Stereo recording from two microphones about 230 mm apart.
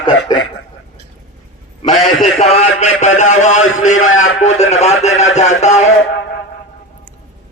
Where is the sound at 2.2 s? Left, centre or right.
Left.